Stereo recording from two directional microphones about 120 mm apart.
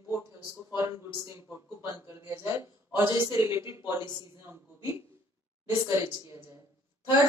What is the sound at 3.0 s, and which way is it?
Speech, 40° left (ahead or behind).